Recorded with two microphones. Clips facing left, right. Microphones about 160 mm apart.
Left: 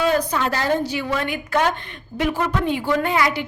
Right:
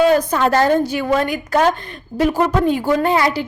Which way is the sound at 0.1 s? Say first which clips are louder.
Right 6 dB; 45° right (ahead or behind).